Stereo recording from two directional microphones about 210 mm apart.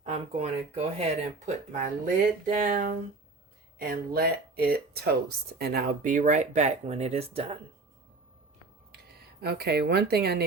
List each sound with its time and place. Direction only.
0.0 s speech: 30° right (ahead or behind)
8.9 s speech: 50° right (ahead or behind)